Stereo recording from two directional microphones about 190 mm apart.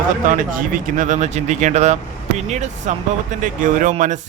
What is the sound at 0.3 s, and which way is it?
Speech, 45° right (ahead or behind).